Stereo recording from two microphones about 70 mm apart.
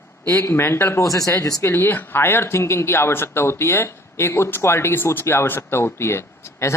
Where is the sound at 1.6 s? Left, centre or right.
Left.